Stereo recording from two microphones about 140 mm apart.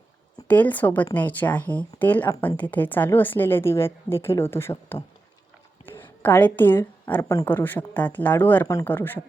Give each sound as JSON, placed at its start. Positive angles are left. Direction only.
{"t": 0.4, "sound": "a woman's voice", "side_deg": 10}
{"t": 5.8, "sound": "a sound", "side_deg": 15}
{"t": 7.2, "sound": "speech", "side_deg": 25}
{"t": 7.4, "sound": "a woman's voice", "side_deg": 10}